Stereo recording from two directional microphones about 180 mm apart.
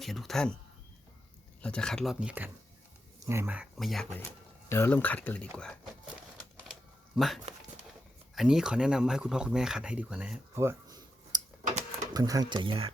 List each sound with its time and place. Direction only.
0.0 s speech: centre (ahead or behind)
1.6 s speech: 5° left (ahead or behind)
4.7 s speech: 10° left (ahead or behind)
8.4 s speech: 5° right (ahead or behind); by 11.4 s 20° right (ahead or behind)
11.6 s a sound: 45° right (ahead or behind)
12.1 s speech: 20° right (ahead or behind)